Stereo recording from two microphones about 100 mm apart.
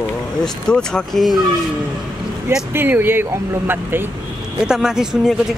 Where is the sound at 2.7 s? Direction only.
20° right (ahead or behind).